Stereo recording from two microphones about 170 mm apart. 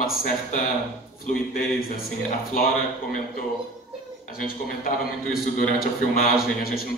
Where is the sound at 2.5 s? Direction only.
55° left (ahead or behind).